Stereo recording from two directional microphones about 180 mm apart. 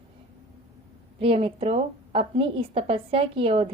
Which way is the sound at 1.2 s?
30° right (ahead or behind).